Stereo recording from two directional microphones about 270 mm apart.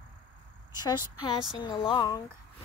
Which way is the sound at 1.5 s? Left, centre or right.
Centre.